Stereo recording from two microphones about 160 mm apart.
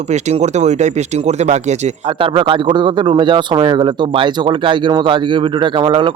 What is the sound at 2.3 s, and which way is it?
Speech, 30° right (ahead or behind).